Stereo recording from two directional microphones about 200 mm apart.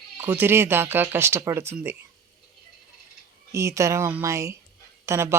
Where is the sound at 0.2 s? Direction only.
10° right (ahead or behind).